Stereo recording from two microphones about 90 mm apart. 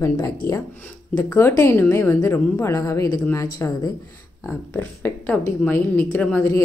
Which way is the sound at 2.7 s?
40° left (ahead or behind).